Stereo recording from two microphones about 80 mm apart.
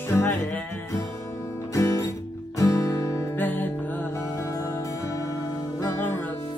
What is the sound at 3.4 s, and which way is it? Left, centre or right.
Music, left.